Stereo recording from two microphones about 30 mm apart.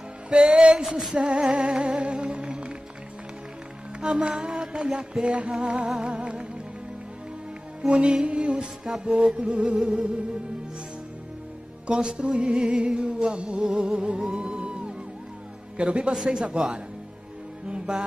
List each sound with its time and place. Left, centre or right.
0.3 s music: right
0.6 s a sound: right
0.8 s music: centre
1.1 s music: right
4.0 s music: right
5.2 s music: right
7.8 s music: right
11.9 s music: right